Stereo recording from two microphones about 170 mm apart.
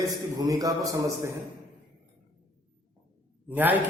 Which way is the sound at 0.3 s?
20° right (ahead or behind).